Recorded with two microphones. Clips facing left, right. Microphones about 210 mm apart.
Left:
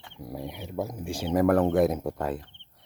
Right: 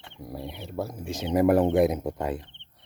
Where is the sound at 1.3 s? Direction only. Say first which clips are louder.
Right 1 dB; 5° right (ahead or behind).